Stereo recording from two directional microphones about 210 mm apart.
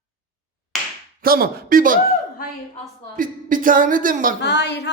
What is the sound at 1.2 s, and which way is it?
Speech, 45° right (ahead or behind).